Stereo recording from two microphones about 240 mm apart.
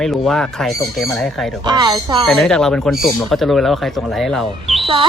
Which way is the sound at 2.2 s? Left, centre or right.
Centre.